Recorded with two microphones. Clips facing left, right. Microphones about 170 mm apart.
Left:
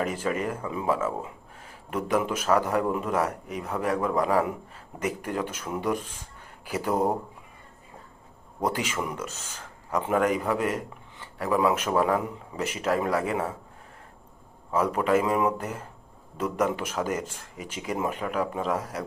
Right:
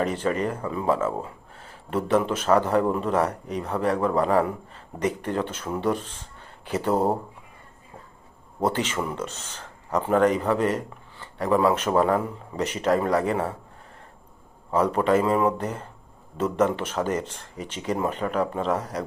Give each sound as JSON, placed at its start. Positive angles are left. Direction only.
{"t": 0.0, "sound": "speech", "side_deg": 10}
{"t": 6.9, "sound": "speech", "side_deg": -30}
{"t": 8.7, "sound": "speech", "side_deg": 10}
{"t": 14.7, "sound": "speech", "side_deg": 10}